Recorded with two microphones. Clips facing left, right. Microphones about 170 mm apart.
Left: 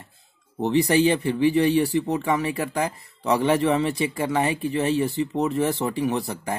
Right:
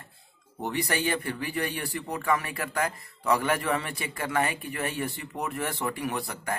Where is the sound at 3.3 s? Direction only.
25° left (ahead or behind).